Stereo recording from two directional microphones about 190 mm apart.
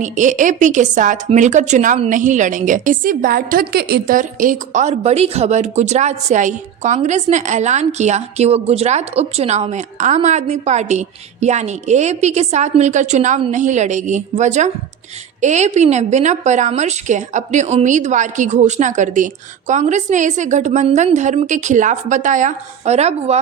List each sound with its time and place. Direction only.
0.0 s a woman's voice: 40° right (ahead or behind)